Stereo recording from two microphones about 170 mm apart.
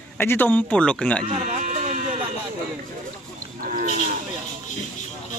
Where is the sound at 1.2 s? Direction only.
45° right (ahead or behind).